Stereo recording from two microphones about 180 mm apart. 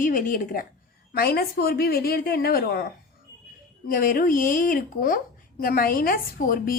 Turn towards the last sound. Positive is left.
turn(degrees=55)  # may be behind; listen again after turning